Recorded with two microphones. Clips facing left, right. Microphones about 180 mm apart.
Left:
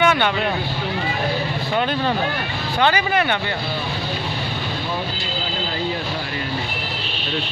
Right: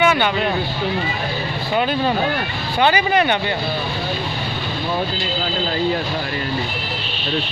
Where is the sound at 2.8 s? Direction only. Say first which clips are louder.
Right 3 dB; 20° right (ahead or behind).